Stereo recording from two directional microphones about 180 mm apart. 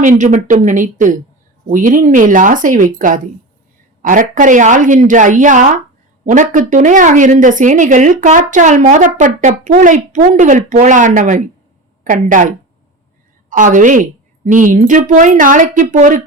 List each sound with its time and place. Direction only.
0.0 s speech: 45° right (ahead or behind)